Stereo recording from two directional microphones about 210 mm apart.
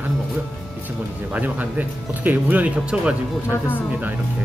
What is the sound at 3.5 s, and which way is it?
Speech, 10° left (ahead or behind).